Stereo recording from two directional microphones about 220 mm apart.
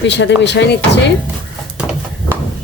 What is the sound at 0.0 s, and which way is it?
Speech, 55° left (ahead or behind).